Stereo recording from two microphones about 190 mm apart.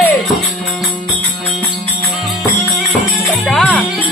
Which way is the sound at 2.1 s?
Centre (ahead or behind).